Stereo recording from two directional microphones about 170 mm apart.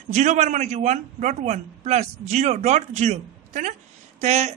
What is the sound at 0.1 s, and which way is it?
A man's voice, 45° right (ahead or behind).